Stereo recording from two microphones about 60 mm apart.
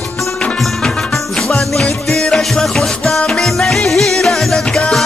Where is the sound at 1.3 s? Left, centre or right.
Centre.